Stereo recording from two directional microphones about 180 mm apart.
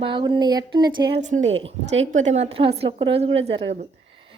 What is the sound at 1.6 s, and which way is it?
A woman's voice, 35° right (ahead or behind).